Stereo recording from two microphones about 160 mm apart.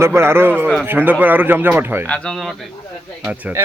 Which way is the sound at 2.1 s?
5° left (ahead or behind).